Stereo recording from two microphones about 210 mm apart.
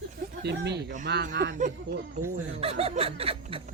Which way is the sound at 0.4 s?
55° right (ahead or behind).